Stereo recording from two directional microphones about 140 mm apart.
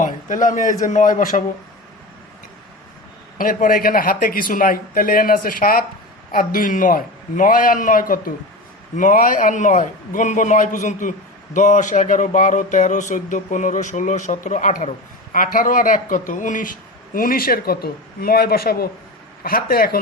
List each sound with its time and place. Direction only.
0.0 s a man's voice: 65° left (ahead or behind)
3.3 s a man's voice: 85° left
17.2 s speech: 90° left